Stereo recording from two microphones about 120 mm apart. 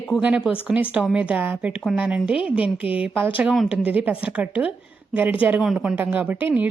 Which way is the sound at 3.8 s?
10° right (ahead or behind).